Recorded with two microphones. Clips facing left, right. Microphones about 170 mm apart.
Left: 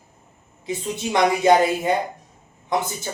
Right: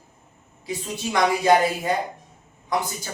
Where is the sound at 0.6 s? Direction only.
20° left (ahead or behind).